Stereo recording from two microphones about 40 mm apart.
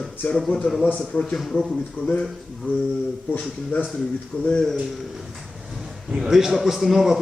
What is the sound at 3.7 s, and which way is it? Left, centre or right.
Speech, left.